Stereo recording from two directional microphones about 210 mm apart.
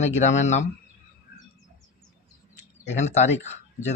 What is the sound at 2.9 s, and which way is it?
Speech, 35° left (ahead or behind).